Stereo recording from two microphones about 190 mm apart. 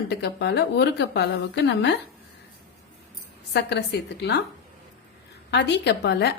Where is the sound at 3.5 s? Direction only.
65° left (ahead or behind).